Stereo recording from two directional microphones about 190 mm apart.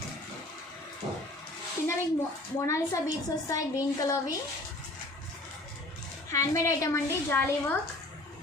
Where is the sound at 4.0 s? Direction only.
20° left (ahead or behind).